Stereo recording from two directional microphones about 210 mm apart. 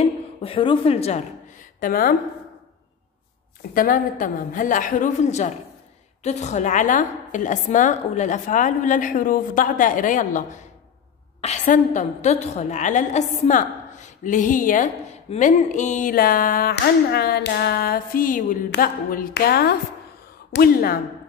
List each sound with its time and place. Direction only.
0.0 s speech: 25° left (ahead or behind); by 2.1 s 45° left (ahead or behind)
3.7 s a woman's voice: 40° left (ahead or behind)